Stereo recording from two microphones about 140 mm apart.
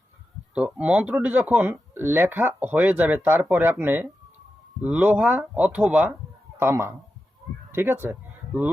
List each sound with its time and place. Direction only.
0.5 s speech: 10° right (ahead or behind)